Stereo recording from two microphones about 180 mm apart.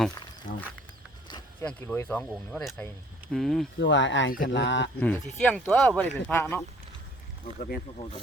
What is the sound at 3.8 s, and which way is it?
Speech, 90° left.